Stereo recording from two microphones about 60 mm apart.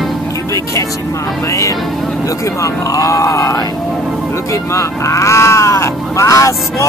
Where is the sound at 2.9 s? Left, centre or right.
Left.